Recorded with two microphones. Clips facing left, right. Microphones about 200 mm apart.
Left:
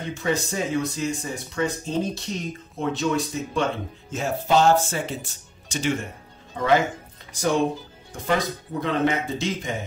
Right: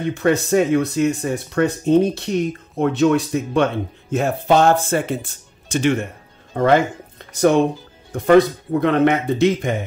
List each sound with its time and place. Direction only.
0.1 s speech: 60° right (ahead or behind)
8.8 s speech: 60° right (ahead or behind)